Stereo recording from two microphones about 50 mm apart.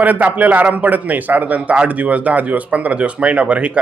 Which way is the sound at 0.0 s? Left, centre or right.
Right.